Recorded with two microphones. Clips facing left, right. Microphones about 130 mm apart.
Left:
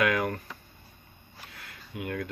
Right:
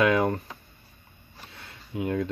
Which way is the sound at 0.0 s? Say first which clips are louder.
Right 5 dB; 25° right (ahead or behind).